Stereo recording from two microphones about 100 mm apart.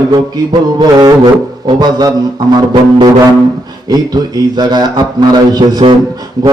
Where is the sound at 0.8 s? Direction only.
45° right (ahead or behind).